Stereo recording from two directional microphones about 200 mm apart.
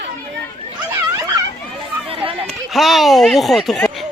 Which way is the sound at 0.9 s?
15° right (ahead or behind).